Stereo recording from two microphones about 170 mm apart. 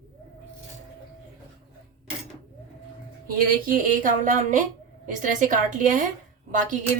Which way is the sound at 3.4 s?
55° right (ahead or behind).